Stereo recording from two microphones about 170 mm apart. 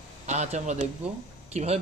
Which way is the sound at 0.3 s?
45° right (ahead or behind).